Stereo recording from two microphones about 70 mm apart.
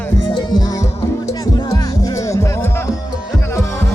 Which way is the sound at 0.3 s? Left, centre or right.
Left.